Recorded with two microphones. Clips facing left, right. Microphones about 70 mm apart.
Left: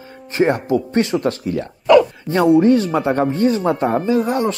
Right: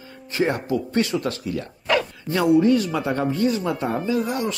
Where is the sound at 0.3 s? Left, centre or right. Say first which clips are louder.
Left 6 dB; left.